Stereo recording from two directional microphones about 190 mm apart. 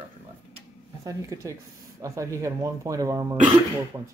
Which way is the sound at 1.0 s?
15° right (ahead or behind).